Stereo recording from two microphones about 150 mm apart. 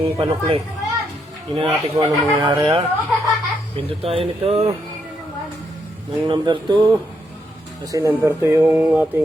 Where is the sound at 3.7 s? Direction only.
40° right (ahead or behind).